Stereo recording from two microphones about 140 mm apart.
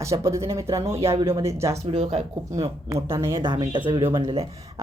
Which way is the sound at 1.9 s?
50° right (ahead or behind).